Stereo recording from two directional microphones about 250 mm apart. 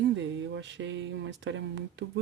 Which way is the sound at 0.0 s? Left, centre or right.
Right.